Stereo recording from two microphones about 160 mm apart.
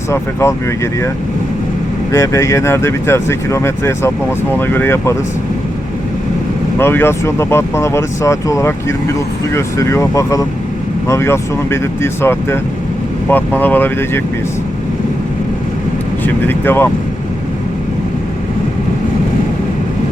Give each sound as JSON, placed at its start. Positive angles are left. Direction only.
{"t": 0.1, "sound": "speech", "side_deg": 15}
{"t": 2.1, "sound": "speech", "side_deg": 20}
{"t": 6.7, "sound": "speech", "side_deg": 15}
{"t": 16.2, "sound": "speech", "side_deg": 15}